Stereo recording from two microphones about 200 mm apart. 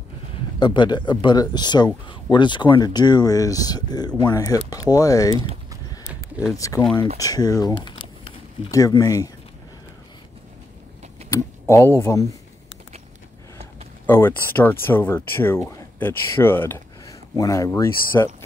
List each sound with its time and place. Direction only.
0.6 s speech: 25° left (ahead or behind)
6.0 s a sound: 5° right (ahead or behind)
6.5 s speech: 15° left (ahead or behind)
11.3 s speech: 15° left (ahead or behind)
14.0 s speech: 10° left (ahead or behind)